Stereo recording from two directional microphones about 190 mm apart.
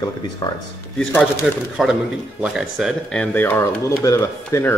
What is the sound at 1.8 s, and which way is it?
Speech, 5° right (ahead or behind).